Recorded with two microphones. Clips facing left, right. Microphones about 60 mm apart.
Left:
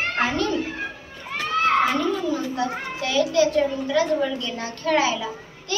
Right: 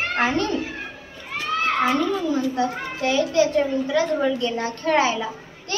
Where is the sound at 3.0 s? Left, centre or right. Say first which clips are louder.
Right 1 dB; right.